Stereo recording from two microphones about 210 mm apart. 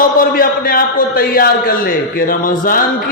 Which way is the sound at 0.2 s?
45° left (ahead or behind).